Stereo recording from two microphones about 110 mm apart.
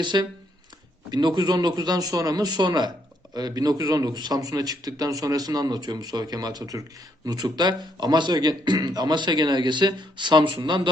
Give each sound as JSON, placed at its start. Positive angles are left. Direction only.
{"t": 0.0, "sound": "speech", "side_deg": -45}